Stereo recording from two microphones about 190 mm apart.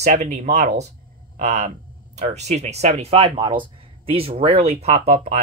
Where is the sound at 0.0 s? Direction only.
40° right (ahead or behind).